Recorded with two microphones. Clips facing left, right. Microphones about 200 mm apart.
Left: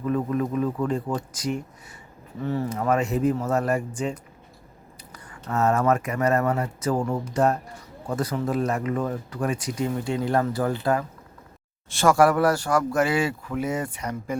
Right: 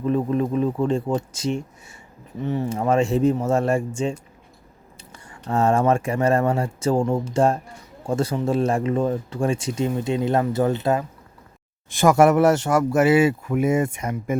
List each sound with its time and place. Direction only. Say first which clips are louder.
0.0 s speech: right 3 dB; 25° right (ahead or behind)
13.2 s speech: right 7 dB; 10° right (ahead or behind)
13.8 s speech: right 5 dB; 25° right (ahead or behind)